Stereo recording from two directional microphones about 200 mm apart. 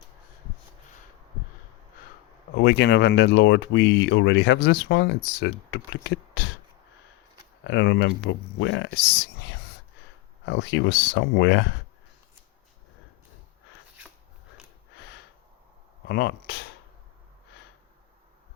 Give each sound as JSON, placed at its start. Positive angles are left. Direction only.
{"t": 2.6, "sound": "speech", "side_deg": 55}
{"t": 7.6, "sound": "speech", "side_deg": 60}
{"t": 16.0, "sound": "speech", "side_deg": 55}